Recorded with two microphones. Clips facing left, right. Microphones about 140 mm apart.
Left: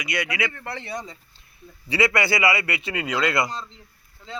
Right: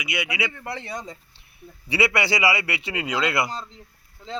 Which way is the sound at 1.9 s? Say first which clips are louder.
Left 1 dB; 10° right (ahead or behind).